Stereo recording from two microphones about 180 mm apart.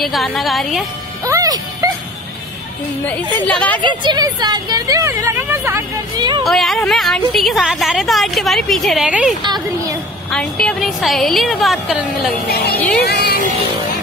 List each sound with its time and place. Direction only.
0.0 s a woman's voice: centre (ahead or behind)
1.2 s speech: 20° right (ahead or behind)
3.4 s speech: 10° left (ahead or behind)
3.8 s a woman's voice: 25° right (ahead or behind)
6.1 s a woman's voice: 25° right (ahead or behind)
6.4 s a woman's voice: centre (ahead or behind)
9.4 s a woman's voice: 25° right (ahead or behind)
10.3 s a woman's voice: 5° left (ahead or behind)
13.0 s speech: 65° left (ahead or behind)